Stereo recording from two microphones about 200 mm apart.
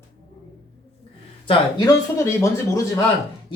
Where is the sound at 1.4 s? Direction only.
20° left (ahead or behind).